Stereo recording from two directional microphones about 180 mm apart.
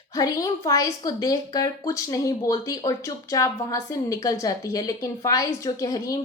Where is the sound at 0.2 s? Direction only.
20° left (ahead or behind).